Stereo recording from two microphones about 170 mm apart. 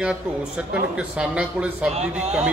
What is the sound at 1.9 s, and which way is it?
Speech, 40° right (ahead or behind).